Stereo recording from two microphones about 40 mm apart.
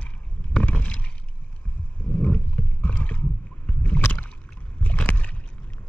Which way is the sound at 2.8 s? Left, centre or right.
Left.